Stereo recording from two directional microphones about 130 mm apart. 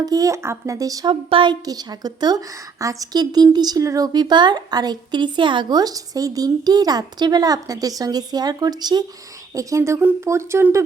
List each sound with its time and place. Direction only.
0.0 s speech: 30° right (ahead or behind)
1.3 s a woman's voice: 40° right (ahead or behind); by 10.8 s 20° right (ahead or behind)